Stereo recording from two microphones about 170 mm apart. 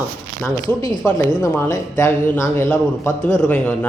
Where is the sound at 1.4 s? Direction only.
20° left (ahead or behind).